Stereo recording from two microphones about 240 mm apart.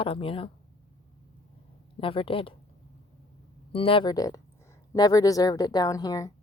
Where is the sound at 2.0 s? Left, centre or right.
Left.